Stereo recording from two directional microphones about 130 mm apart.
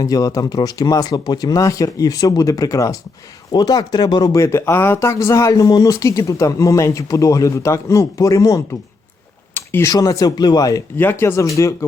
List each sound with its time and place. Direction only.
0.0 s speech: 30° left (ahead or behind)
9.6 s a sound: 15° left (ahead or behind)
9.9 s speech: 25° left (ahead or behind)
10.9 s speech: 15° left (ahead or behind)